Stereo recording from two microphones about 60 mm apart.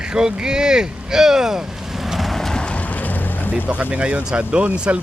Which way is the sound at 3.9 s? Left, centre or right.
Centre.